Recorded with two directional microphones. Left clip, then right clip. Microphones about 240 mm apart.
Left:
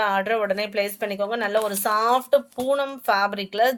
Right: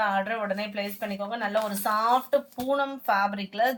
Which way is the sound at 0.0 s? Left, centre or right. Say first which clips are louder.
Left 5 dB; left.